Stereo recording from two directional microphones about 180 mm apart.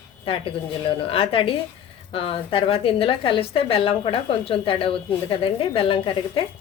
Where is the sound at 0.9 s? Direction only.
30° left (ahead or behind).